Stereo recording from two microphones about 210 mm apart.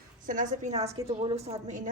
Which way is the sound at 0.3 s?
35° right (ahead or behind).